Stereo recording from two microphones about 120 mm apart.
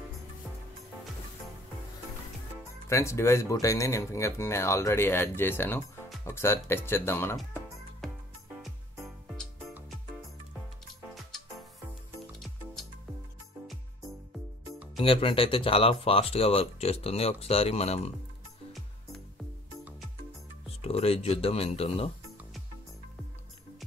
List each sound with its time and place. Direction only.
2.9 s speech: 25° left (ahead or behind)
8.6 s music: centre (ahead or behind)
15.0 s speech: 50° left (ahead or behind)
20.6 s speech: 55° left (ahead or behind)